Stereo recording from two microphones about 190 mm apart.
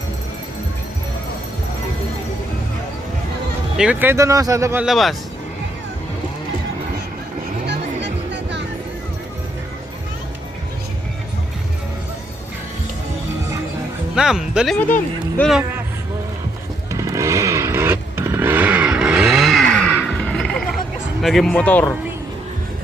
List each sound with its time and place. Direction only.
3.8 s speech: 10° right (ahead or behind)
7.7 s music: 65° right (ahead or behind)
14.2 s speech: 5° right (ahead or behind)
16.9 s chainsaw: 15° right (ahead or behind); by 20.7 s 5° left (ahead or behind)
21.2 s speech: centre (ahead or behind)